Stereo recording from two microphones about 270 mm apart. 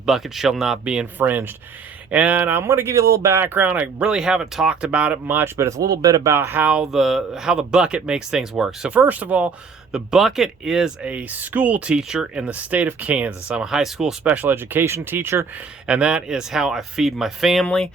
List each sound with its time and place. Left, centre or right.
0.0 s speech: centre